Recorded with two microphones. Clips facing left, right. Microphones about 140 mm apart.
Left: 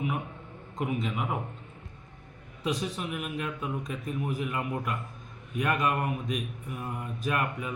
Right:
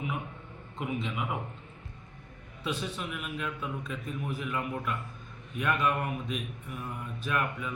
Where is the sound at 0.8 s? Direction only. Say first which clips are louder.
Left 3 dB; 40° left (ahead or behind).